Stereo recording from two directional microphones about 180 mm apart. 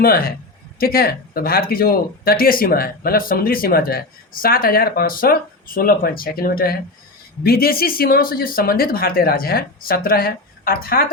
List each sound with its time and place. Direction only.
0.0 s speech: 55° left (ahead or behind)